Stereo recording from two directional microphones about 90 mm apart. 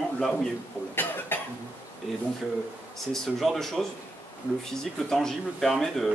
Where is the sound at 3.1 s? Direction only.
5° left (ahead or behind).